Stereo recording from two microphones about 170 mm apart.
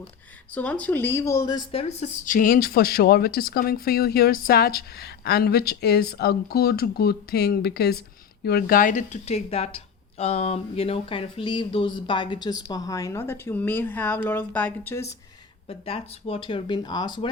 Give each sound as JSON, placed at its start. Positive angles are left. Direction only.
{"t": 0.5, "sound": "speech", "side_deg": 10}
{"t": 1.8, "sound": "a woman's voice", "side_deg": 40}
{"t": 15.7, "sound": "a woman's voice", "side_deg": 35}